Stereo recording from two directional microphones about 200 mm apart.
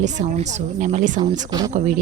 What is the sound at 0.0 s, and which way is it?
Speech, 35° right (ahead or behind).